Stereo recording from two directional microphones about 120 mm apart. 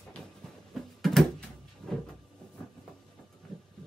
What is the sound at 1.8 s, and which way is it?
Cupboard open or close, 20° right (ahead or behind).